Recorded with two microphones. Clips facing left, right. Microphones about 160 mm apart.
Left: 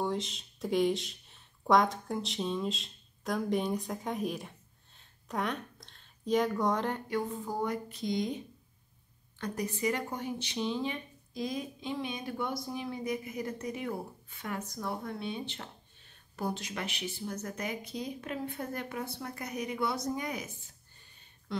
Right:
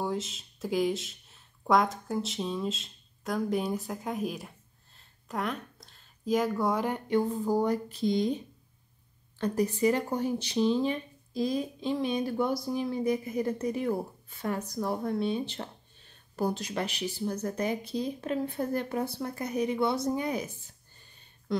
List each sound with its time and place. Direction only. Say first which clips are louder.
0.0 s speech: right 1 dB; centre (ahead or behind)
7.1 s speech: right 7 dB; 30° right (ahead or behind)
9.4 s speech: right 7 dB; 30° right (ahead or behind)